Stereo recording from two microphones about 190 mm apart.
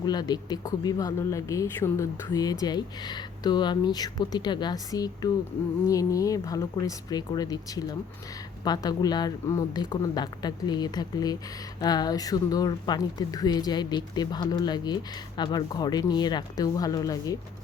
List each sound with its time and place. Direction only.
0.0 s speech: 20° left (ahead or behind)